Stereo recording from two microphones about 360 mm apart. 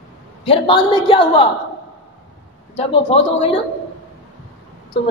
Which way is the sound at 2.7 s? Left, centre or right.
Centre.